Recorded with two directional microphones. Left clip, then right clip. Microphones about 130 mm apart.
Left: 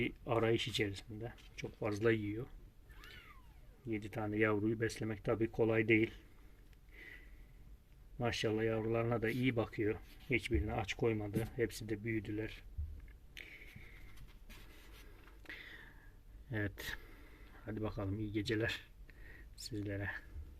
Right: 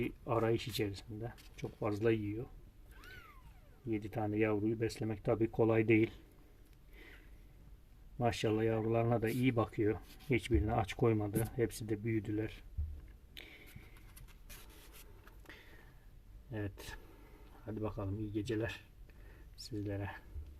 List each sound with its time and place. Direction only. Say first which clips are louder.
0.0 s speech: even; 10° right (ahead or behind); by 2.0 s 30° right (ahead or behind)
3.8 s speech: right 3 dB; 35° right (ahead or behind)
4.5 s speech: right 1 dB; 5° right (ahead or behind)
4.8 s speech: right 1 dB; 15° right (ahead or behind)
5.0 s speech: right 5 dB; 30° right (ahead or behind)
6.9 s a sound: left 4 dB; 35° right (ahead or behind)
8.2 s speech: right 2 dB; 35° right (ahead or behind)
11.3 s speech: right 2 dB; 35° right (ahead or behind)
13.3 s vehicle: left 1 dB; 40° right (ahead or behind)
16.5 s speech: left 3 dB; 15° left (ahead or behind)
19.6 s speech: even; 10° right (ahead or behind)